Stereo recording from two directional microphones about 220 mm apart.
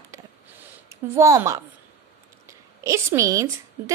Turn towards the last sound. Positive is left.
turn(degrees=-15)  # may be behind; listen again after turning